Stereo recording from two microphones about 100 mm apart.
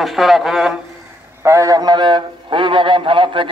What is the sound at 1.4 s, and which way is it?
A man's voice, 30° right (ahead or behind).